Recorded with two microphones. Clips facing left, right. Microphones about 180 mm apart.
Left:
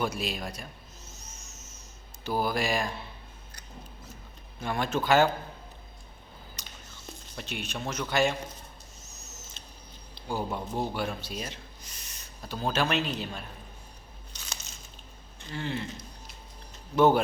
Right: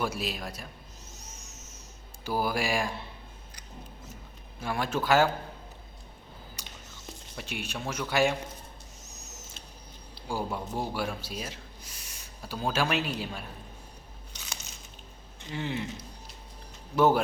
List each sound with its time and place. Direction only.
0.0 s speech: 5° right (ahead or behind)
1.3 s vehicle: 35° right (ahead or behind)
2.2 s speech: 10° right (ahead or behind)
4.6 s speech: 5° right (ahead or behind)
6.6 s a sound: 10° right (ahead or behind)
7.9 s speech: 10° right (ahead or behind)
10.2 s speech: 5° right (ahead or behind)
15.4 s speech: 15° right (ahead or behind)
16.9 s speech: 5° right (ahead or behind)